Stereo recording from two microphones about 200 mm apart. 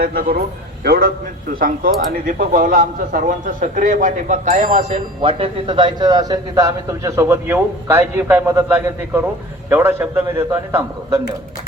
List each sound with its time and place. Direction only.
0.0 s a man's voice: 45° right (ahead or behind); by 11.2 s 10° right (ahead or behind)